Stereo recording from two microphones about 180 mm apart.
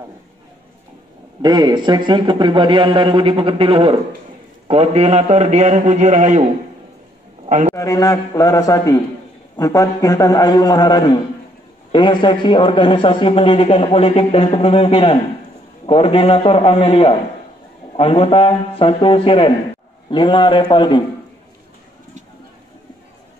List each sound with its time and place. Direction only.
1.4 s a man's voice: 25° right (ahead or behind); by 6.4 s 40° right (ahead or behind)
7.4 s a man's voice: 40° right (ahead or behind)
7.7 s a man's voice: 20° left (ahead or behind)